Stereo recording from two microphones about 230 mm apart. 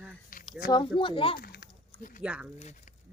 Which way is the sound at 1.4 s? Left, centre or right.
Left.